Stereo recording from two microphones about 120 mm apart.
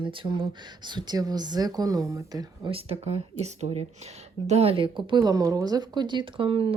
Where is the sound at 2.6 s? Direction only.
55° right (ahead or behind).